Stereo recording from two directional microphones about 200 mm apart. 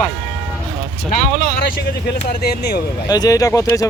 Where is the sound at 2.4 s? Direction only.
55° left (ahead or behind).